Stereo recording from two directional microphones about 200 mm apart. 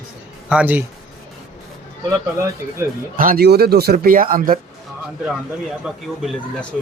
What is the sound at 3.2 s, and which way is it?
Speech, 45° right (ahead or behind).